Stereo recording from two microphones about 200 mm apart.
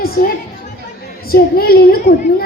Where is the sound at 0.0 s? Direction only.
50° left (ahead or behind).